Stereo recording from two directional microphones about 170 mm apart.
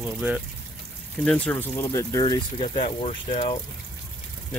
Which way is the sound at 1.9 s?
20° left (ahead or behind).